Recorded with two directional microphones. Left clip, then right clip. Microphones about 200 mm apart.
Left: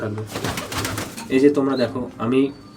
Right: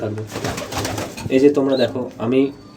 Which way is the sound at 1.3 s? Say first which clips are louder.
Right 2 dB; 15° left (ahead or behind).